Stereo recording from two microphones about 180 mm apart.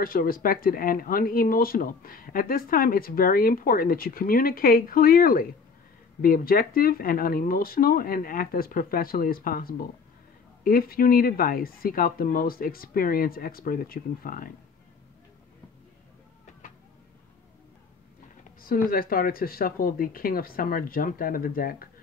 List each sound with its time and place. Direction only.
0.0 s speech: 55° left (ahead or behind)
18.9 s speech: 55° left (ahead or behind)